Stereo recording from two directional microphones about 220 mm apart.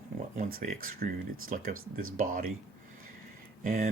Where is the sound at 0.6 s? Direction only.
40° right (ahead or behind).